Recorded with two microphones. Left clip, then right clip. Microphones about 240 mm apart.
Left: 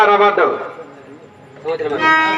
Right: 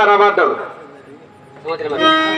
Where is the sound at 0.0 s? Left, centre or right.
Centre.